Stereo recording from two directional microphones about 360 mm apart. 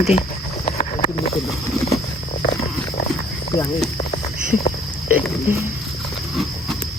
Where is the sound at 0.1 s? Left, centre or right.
Centre.